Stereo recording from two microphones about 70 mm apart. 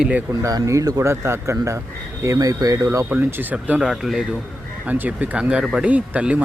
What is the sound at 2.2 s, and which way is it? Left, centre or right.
Speech, right.